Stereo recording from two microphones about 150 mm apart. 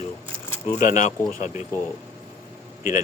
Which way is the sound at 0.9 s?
55° left (ahead or behind).